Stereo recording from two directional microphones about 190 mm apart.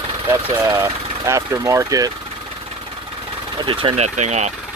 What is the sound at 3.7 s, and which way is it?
Speech, 25° right (ahead or behind).